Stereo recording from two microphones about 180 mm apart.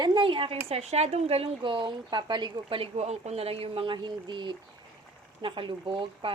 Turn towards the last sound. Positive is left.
turn(degrees=-30)  # may be behind; listen again after turning